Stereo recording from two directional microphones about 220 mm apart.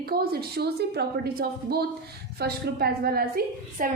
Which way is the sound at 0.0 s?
45° right (ahead or behind).